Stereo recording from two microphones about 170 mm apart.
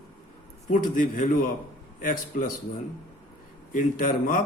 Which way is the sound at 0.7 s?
50° left (ahead or behind).